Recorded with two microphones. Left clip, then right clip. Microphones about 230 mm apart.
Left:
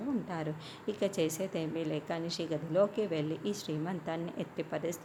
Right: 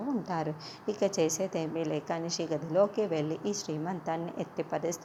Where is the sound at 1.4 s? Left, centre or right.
Centre.